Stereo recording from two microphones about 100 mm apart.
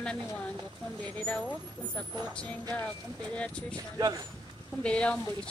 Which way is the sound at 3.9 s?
40° right (ahead or behind).